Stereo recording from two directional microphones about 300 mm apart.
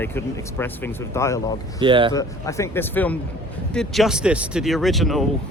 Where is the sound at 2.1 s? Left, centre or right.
Centre.